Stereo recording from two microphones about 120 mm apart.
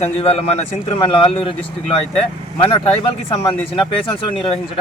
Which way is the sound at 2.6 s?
55° left (ahead or behind).